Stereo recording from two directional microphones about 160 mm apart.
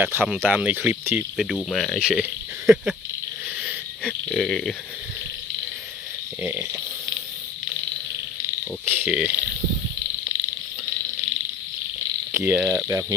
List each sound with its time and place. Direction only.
0.0 s speech: 10° right (ahead or behind)
1.5 s speech: 5° left (ahead or behind)
4.0 s speech: 5° left (ahead or behind)
6.4 s speech: 15° right (ahead or behind)
9.0 s speech: 10° right (ahead or behind)
12.4 s speech: 5° right (ahead or behind)
12.9 s speech: 20° right (ahead or behind)